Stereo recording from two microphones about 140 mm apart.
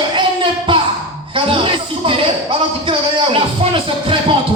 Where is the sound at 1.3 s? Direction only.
35° right (ahead or behind).